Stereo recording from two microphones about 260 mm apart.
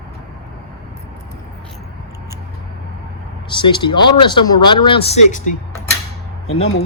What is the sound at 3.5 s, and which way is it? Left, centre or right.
Speech, centre.